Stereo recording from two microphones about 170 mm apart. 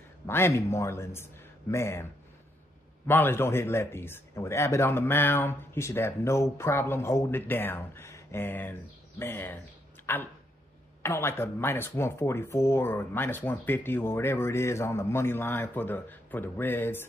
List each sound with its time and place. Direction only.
0.3 s speech: 15° left (ahead or behind)
3.1 s speech: 15° left (ahead or behind)